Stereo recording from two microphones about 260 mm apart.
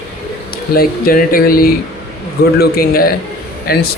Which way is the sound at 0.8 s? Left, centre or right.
Left.